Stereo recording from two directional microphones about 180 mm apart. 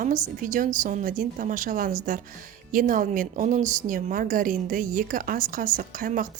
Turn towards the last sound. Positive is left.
turn(degrees=-50)  # may be behind; listen again after turning